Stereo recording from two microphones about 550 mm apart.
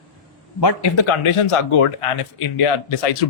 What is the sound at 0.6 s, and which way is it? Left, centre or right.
Speech, left.